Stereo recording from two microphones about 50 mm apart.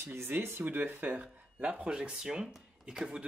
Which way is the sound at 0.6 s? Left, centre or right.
Right.